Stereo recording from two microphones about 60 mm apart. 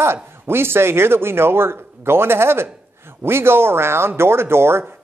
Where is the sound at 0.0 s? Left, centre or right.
Right.